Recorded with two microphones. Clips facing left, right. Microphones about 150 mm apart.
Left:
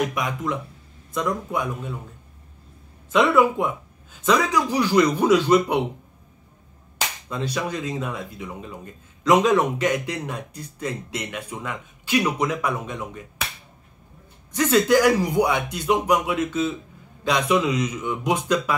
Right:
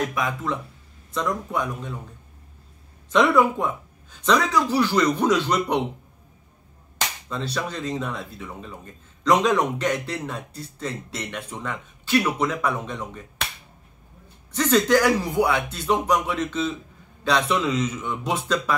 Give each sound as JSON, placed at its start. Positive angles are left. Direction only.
{"t": 0.0, "sound": "speech", "side_deg": 15}
{"t": 3.1, "sound": "speech", "side_deg": 5}
{"t": 7.2, "sound": "speech", "side_deg": 10}
{"t": 14.5, "sound": "speech", "side_deg": 10}